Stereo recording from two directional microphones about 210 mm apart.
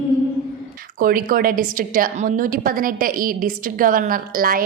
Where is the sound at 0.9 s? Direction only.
40° right (ahead or behind).